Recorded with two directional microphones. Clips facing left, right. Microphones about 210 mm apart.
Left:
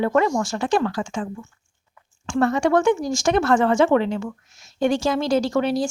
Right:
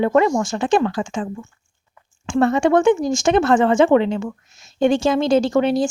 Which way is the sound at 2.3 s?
25° right (ahead or behind).